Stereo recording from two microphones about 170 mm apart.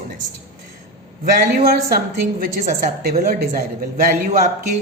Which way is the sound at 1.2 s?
60° right (ahead or behind).